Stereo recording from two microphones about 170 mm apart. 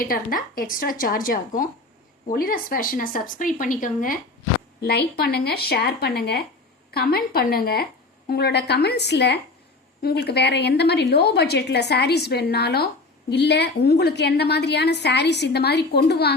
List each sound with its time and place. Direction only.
0.0 s speech: 55° left (ahead or behind)
4.9 s a woman's voice: 65° left (ahead or behind)
13.3 s a woman's voice: 80° left